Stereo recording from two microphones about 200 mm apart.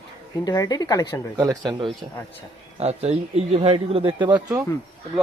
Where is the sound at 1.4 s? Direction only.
20° right (ahead or behind).